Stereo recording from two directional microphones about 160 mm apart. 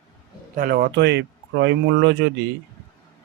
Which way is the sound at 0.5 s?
80° right.